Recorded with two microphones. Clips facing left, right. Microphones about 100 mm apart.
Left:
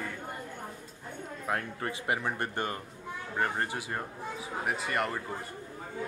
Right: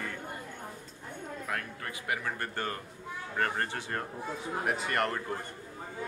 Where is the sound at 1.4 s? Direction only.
25° left (ahead or behind); by 5.1 s 5° left (ahead or behind).